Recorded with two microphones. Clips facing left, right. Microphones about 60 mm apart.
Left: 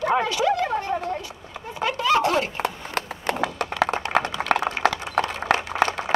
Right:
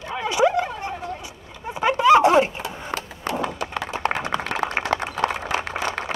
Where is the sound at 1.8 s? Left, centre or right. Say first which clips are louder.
Right 6 dB; right.